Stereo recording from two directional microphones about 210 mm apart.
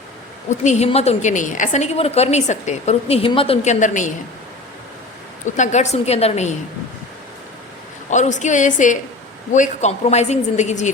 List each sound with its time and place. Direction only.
0.6 s a woman's voice: 35° left (ahead or behind)
5.5 s a woman's voice: 35° left (ahead or behind)
8.1 s a woman's voice: 35° left (ahead or behind)